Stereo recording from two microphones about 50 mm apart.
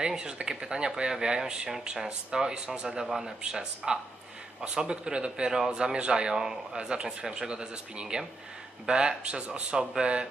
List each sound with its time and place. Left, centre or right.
0.0 s a man's voice: centre